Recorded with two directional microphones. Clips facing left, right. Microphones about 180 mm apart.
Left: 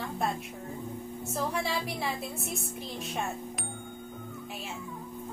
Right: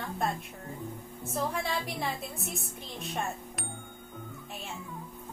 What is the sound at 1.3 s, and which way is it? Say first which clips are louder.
A woman's voice: even; centre (ahead or behind).